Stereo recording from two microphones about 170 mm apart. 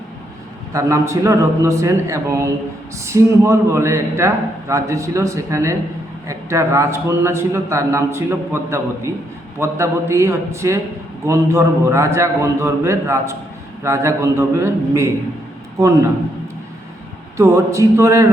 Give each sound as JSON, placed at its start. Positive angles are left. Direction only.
{"t": 0.7, "sound": "a man's voice", "side_deg": -20}
{"t": 17.3, "sound": "a man's voice", "side_deg": -20}